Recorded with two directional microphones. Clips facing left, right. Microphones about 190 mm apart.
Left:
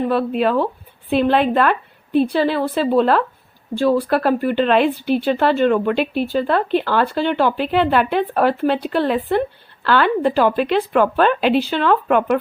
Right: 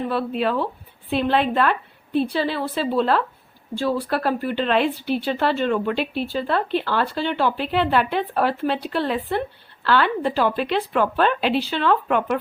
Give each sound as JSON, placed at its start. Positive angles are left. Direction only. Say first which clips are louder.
{"t": 0.1, "sound": "speech", "louder": "left 5 dB", "side_deg": 50}